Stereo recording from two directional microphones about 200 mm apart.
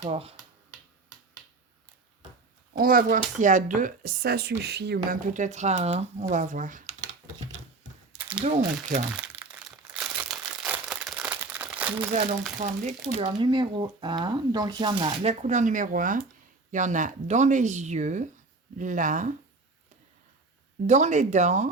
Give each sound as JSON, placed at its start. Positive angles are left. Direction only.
{"t": 0.0, "sound": "speech", "side_deg": -30}
{"t": 2.7, "sound": "speech", "side_deg": -45}
{"t": 5.3, "sound": "speech", "side_deg": -35}
{"t": 8.4, "sound": "speech", "side_deg": -35}
{"t": 9.2, "sound": "crumpling", "side_deg": -5}
{"t": 12.5, "sound": "speech", "side_deg": -35}
{"t": 20.8, "sound": "speech", "side_deg": -35}